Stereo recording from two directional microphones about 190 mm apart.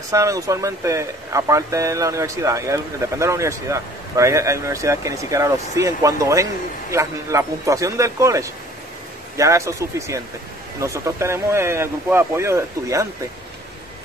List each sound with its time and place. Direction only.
0.1 s speech: 15° right (ahead or behind)